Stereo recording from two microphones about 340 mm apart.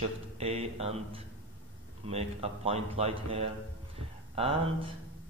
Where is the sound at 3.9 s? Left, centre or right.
Centre.